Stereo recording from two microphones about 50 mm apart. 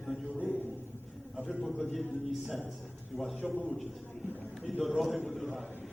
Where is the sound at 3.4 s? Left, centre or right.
Left.